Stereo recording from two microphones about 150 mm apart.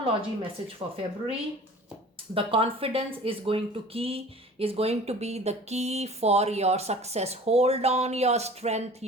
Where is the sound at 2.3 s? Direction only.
40° right (ahead or behind).